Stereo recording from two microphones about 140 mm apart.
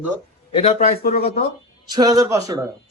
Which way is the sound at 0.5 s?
50° left (ahead or behind).